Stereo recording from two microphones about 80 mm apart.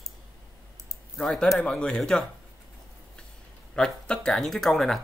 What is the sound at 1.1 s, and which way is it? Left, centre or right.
Speech, centre.